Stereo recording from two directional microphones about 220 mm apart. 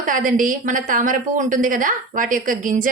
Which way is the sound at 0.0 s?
40° right (ahead or behind).